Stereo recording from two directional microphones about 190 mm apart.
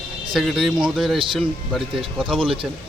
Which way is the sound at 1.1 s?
25° right (ahead or behind).